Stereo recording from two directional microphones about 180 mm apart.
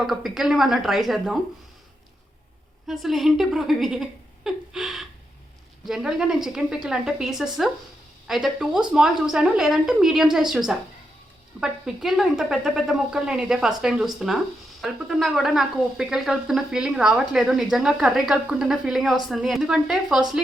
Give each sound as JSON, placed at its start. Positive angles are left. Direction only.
{"t": 0.0, "sound": "speech", "side_deg": 0}
{"t": 2.8, "sound": "a woman's voice", "side_deg": 0}